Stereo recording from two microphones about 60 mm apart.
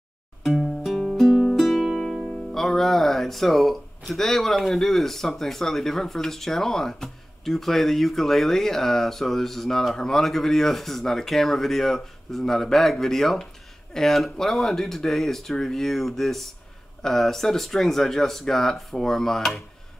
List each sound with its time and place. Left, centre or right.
0.4 s music: centre
4.1 s speech: centre